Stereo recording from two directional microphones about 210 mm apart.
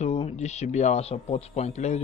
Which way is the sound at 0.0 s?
30° left (ahead or behind).